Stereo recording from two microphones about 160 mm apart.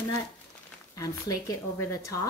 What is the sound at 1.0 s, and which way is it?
Speech, 20° left (ahead or behind).